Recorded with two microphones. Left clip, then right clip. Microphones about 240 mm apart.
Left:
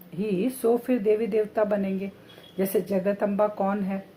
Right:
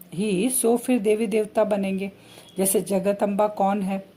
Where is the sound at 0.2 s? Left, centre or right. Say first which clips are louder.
Right 3 dB; right.